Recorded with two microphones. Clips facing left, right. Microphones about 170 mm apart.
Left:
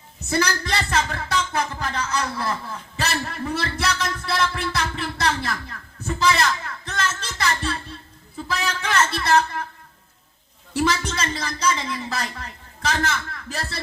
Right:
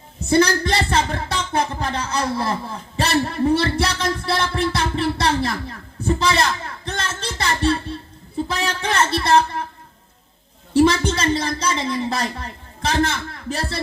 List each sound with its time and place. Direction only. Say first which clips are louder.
0.3 s a man's voice: right 7 dB; 30° right (ahead or behind)
10.8 s a man's voice: right 7 dB; 30° right (ahead or behind)